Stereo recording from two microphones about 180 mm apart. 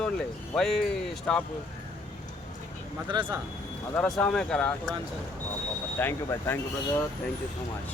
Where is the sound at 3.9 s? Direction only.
5° left (ahead or behind).